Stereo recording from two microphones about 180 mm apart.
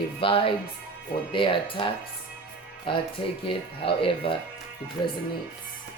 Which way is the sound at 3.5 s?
30° left (ahead or behind).